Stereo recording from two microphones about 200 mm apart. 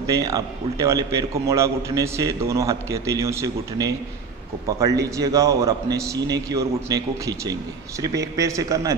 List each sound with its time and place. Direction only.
0.0 s a man's voice: 15° right (ahead or behind)
5.1 s a man's voice: 15° right (ahead or behind)